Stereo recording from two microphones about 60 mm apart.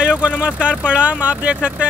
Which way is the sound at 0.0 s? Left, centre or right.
Centre.